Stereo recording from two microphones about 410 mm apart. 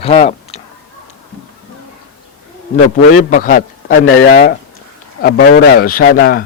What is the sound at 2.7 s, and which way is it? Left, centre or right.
A man's voice, centre.